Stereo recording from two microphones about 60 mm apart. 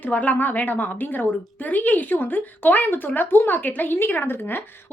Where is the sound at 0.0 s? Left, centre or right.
Left.